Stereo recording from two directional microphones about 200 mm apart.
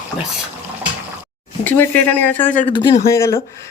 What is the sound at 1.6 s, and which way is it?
Speech, 10° left (ahead or behind).